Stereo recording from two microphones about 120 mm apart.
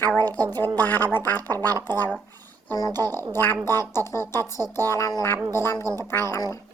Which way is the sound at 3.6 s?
20° left (ahead or behind).